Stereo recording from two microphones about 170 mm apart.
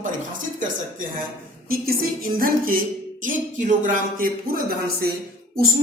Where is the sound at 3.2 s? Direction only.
50° right (ahead or behind).